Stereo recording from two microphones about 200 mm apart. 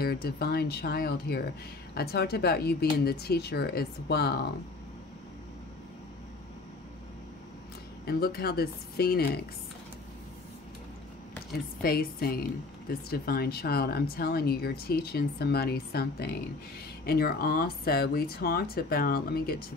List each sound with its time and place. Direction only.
0.0 s speech: 50° left (ahead or behind)
8.0 s speech: 50° left (ahead or behind)
11.8 s speech: 50° left (ahead or behind)